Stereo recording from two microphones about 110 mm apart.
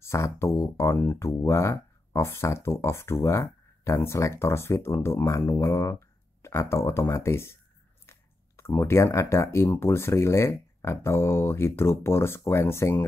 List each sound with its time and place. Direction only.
0.0 s speech: 25° left (ahead or behind)